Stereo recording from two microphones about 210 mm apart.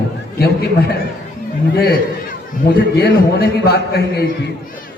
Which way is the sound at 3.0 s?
50° left (ahead or behind).